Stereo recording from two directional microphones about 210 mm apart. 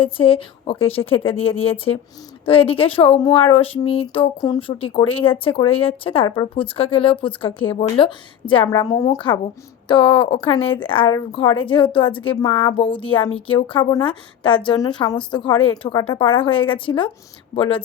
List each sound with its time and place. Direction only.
0.0 s speech: 25° left (ahead or behind)